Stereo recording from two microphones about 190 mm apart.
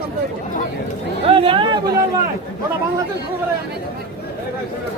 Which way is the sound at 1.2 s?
30° right (ahead or behind).